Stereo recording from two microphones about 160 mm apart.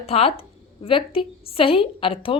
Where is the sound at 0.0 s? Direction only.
40° left (ahead or behind).